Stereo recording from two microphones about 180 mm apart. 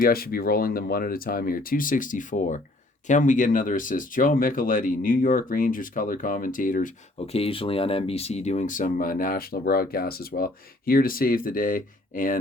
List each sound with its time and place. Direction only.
0.0 s speech: 55° left (ahead or behind)
7.3 s speech: 30° left (ahead or behind); by 12.4 s 50° left (ahead or behind)